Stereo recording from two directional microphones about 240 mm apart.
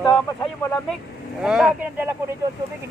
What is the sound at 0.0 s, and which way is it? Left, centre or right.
Speech, centre.